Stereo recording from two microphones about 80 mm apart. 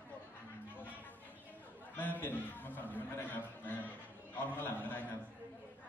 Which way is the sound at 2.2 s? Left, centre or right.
Left.